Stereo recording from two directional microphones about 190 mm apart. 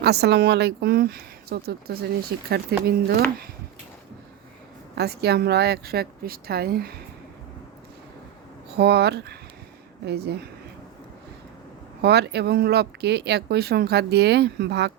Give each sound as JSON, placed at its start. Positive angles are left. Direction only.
{"t": 0.0, "sound": "speech", "side_deg": -60}
{"t": 4.9, "sound": "speech", "side_deg": -60}
{"t": 8.7, "sound": "speech", "side_deg": -60}
{"t": 12.0, "sound": "speech", "side_deg": -60}